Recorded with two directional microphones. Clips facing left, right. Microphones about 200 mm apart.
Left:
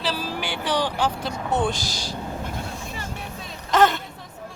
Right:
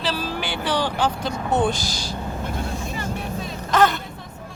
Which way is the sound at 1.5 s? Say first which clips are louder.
Right 3 dB; centre (ahead or behind).